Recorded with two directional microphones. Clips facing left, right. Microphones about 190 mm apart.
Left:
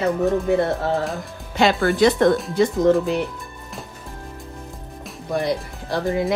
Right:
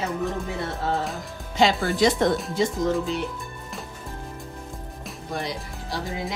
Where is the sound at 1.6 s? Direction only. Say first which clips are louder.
Left 4 dB; 60° left (ahead or behind).